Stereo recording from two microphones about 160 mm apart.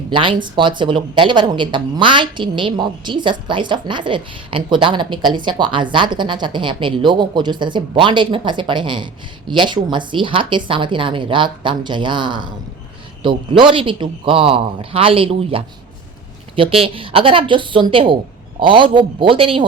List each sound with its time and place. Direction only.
0.1 s a woman's voice: 30° right (ahead or behind)